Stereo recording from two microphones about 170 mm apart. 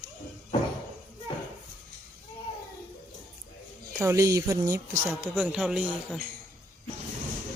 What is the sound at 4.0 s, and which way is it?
A man's voice, 15° right (ahead or behind).